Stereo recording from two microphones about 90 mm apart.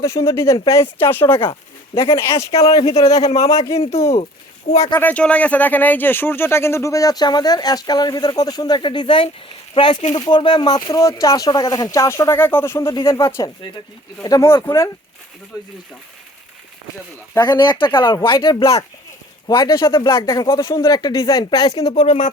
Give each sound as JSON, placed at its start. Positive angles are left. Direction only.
{"t": 0.0, "sound": "speech", "side_deg": 35}
{"t": 0.5, "sound": "speech", "side_deg": 45}
{"t": 0.8, "sound": "speech", "side_deg": 25}
{"t": 4.9, "sound": "speech", "side_deg": 15}
{"t": 8.8, "sound": "speech", "side_deg": 65}
{"t": 17.4, "sound": "speech", "side_deg": 60}
{"t": 18.6, "sound": "speech", "side_deg": 40}
{"t": 19.8, "sound": "speech", "side_deg": 60}
{"t": 20.1, "sound": "speech", "side_deg": 35}
{"t": 21.9, "sound": "speech", "side_deg": 90}